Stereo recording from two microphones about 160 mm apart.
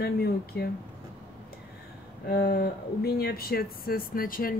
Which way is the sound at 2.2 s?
80° left.